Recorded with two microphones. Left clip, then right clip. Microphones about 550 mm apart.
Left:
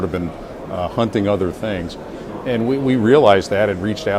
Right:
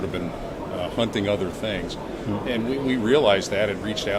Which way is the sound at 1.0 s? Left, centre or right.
Left.